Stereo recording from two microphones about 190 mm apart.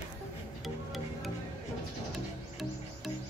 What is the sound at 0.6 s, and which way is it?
Music, centre (ahead or behind).